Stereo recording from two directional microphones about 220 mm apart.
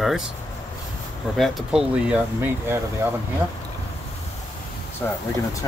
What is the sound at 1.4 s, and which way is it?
Speech, centre (ahead or behind).